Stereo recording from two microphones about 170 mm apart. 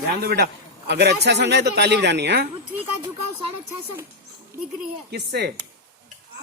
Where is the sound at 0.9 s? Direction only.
80° right.